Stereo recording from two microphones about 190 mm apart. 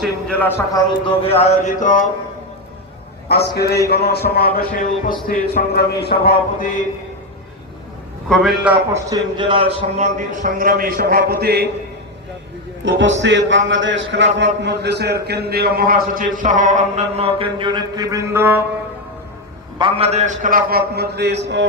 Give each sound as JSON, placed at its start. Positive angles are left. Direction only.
{"t": 0.0, "sound": "a man's voice", "side_deg": 5}
{"t": 1.0, "sound": "speech", "side_deg": 30}
{"t": 3.2, "sound": "a man's voice", "side_deg": 60}
{"t": 8.3, "sound": "a man's voice", "side_deg": 0}
{"t": 9.0, "sound": "a man's voice", "side_deg": -25}
{"t": 10.2, "sound": "a man's voice", "side_deg": -45}
{"t": 12.8, "sound": "a man's voice", "side_deg": -75}
{"t": 19.8, "sound": "a man's voice", "side_deg": -35}